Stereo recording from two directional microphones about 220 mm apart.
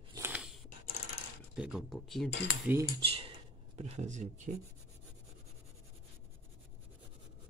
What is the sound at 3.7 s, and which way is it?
Speech, 30° right (ahead or behind).